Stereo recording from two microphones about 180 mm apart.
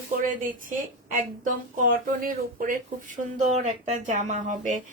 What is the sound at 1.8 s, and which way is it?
Speech, 50° right (ahead or behind).